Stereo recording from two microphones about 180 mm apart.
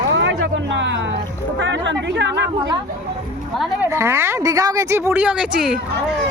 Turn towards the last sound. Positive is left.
turn(degrees=-5)  # may be behind; listen again after turning